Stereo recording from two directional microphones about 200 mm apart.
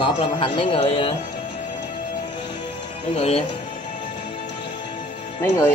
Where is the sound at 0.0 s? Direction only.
25° left (ahead or behind).